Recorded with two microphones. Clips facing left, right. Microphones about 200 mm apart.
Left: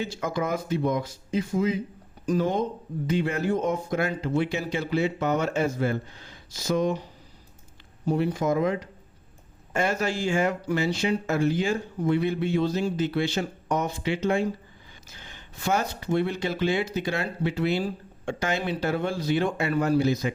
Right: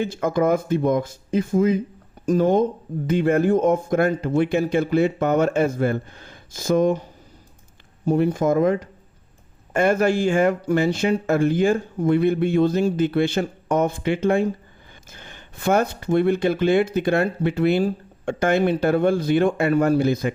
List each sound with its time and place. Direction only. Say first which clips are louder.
0.0 s speech: right 8 dB; 55° right (ahead or behind)